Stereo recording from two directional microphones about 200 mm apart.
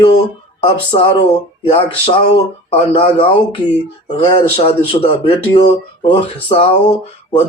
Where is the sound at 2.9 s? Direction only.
30° left (ahead or behind).